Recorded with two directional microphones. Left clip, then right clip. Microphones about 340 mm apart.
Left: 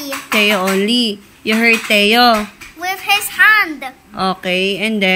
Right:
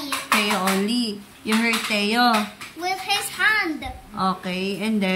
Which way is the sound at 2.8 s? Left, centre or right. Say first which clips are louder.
Left 8 dB; centre.